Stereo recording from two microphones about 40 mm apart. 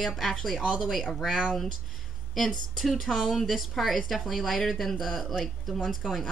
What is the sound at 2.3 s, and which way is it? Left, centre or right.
A woman's voice, centre.